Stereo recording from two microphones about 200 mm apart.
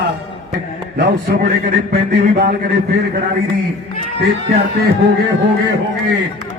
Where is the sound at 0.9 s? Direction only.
55° right (ahead or behind).